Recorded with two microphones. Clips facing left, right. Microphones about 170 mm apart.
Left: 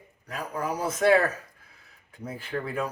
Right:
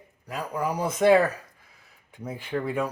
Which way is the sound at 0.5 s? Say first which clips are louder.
Right 2 dB; 10° right (ahead or behind).